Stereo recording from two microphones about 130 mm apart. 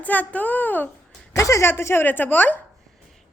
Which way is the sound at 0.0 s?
10° left (ahead or behind).